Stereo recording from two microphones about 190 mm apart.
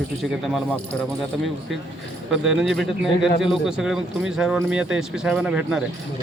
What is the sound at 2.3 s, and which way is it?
Speech, centre (ahead or behind).